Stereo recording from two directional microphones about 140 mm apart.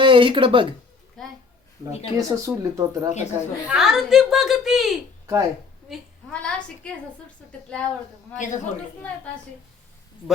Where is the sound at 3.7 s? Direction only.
5° right (ahead or behind).